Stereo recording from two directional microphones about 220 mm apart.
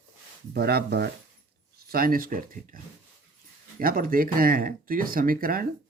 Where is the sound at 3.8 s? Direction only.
40° right (ahead or behind).